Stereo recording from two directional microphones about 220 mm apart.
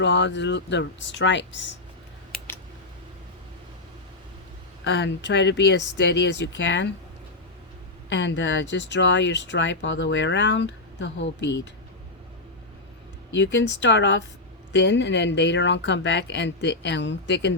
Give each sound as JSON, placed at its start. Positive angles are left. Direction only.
{"t": 0.0, "sound": "speech", "side_deg": 55}
{"t": 4.8, "sound": "speech", "side_deg": 55}
{"t": 8.1, "sound": "speech", "side_deg": 55}
{"t": 13.3, "sound": "speech", "side_deg": 55}